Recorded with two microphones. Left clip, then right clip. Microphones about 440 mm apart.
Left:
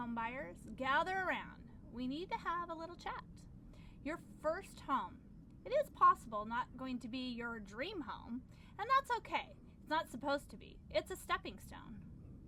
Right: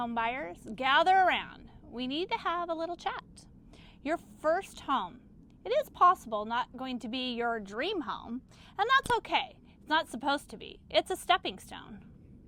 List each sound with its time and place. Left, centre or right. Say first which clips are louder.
0.0 s a woman's voice: right 10 dB; right